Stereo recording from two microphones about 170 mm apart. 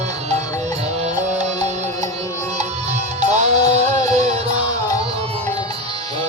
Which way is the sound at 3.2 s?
40° right (ahead or behind).